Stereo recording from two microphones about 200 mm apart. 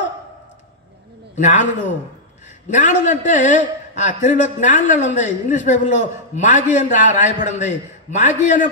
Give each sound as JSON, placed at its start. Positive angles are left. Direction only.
{"t": 1.3, "sound": "a man's voice", "side_deg": 40}
{"t": 2.7, "sound": "a man's voice", "side_deg": 40}